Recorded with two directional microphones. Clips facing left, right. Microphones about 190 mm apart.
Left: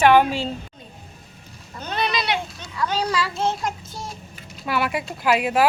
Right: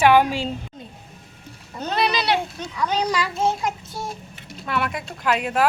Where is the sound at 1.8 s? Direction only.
35° right (ahead or behind).